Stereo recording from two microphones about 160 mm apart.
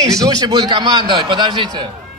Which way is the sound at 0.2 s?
25° right (ahead or behind).